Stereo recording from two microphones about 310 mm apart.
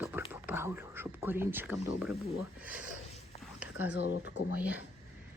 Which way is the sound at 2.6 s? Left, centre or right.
Centre.